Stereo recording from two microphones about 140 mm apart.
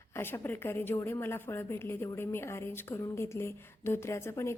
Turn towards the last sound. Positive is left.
turn(degrees=20)  # may be behind; listen again after turning